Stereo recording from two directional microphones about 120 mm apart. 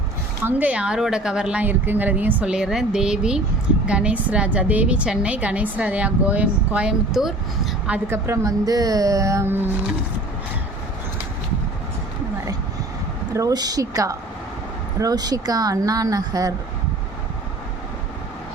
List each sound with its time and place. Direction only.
0.4 s a woman's voice: 10° right (ahead or behind)
8.1 s speech: 25° right (ahead or behind)
13.3 s speech: 30° right (ahead or behind)